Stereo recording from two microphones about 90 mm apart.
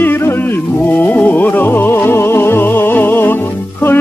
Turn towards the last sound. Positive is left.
turn(degrees=20)  # may be behind; listen again after turning